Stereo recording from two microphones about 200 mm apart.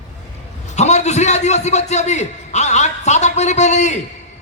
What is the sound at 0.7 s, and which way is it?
A man's voice, 35° left (ahead or behind).